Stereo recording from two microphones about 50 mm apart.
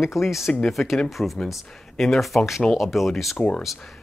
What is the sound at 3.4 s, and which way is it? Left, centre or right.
Speech, left.